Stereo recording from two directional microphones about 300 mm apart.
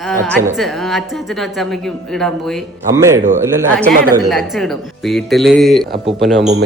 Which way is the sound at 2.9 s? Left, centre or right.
Centre.